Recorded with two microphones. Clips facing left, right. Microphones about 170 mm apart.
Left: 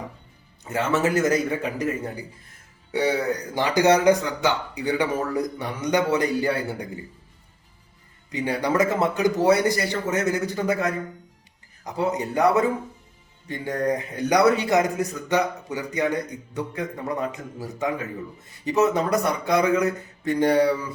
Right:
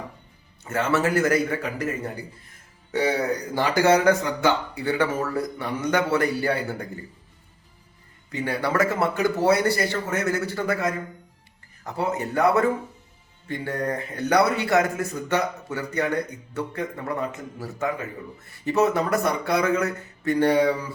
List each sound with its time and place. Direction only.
0.6 s a man's voice: 15° left (ahead or behind)
3.5 s a man's voice: 15° left (ahead or behind)
8.3 s a man's voice: 15° left (ahead or behind)
11.9 s a man's voice: 15° left (ahead or behind)